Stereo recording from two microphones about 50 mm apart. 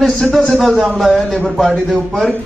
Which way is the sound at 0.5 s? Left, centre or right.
Centre.